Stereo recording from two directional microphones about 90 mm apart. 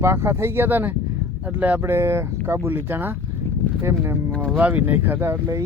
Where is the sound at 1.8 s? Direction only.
30° right (ahead or behind).